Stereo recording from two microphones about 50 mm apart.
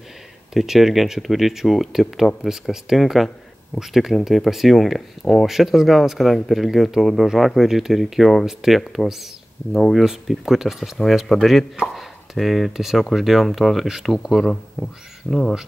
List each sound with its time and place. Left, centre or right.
0.6 s speech: centre
14.5 s speech: centre